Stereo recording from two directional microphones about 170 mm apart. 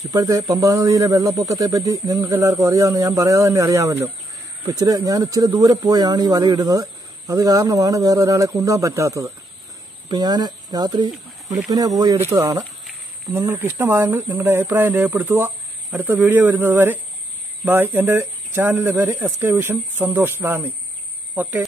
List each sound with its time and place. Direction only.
0.1 s speech: 20° right (ahead or behind)